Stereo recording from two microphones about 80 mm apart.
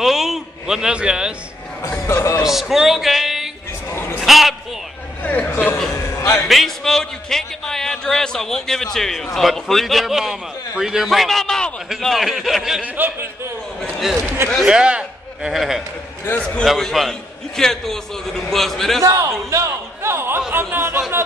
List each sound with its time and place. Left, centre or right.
0.0 s a sound: centre
1.9 s speech: left
2.4 s speech: centre
3.9 s a sound: left
4.2 s a sound: centre
5.2 s a sound: centre
5.5 s chuckle: left
6.3 s a man's voice: centre
12.8 s speech: right
14.7 s a man's voice: centre
16.3 s a man's voice: centre
16.6 s a man's voice: centre
19.0 s a man's voice: right